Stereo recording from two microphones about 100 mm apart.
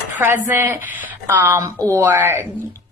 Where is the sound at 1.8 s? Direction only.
30° right (ahead or behind).